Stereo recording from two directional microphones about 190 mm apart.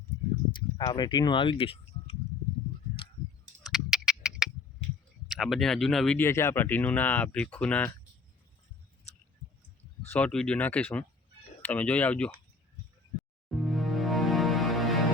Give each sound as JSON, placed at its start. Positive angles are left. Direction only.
{"t": 0.8, "sound": "speech", "side_deg": 20}
{"t": 3.6, "sound": "a sound", "side_deg": 0}
{"t": 5.3, "sound": "speech", "side_deg": 0}
{"t": 10.0, "sound": "speech", "side_deg": 10}
{"t": 13.5, "sound": "music", "side_deg": 0}